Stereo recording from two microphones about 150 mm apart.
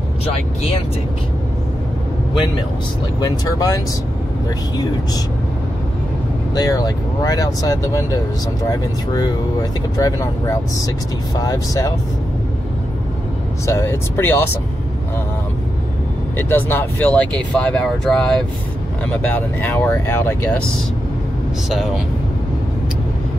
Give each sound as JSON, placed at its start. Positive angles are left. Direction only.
{"t": 3.2, "sound": "speech", "side_deg": 25}
{"t": 6.5, "sound": "speech", "side_deg": 25}
{"t": 13.7, "sound": "speech", "side_deg": 20}
{"t": 16.3, "sound": "speech", "side_deg": 15}
{"t": 21.6, "sound": "speech", "side_deg": 0}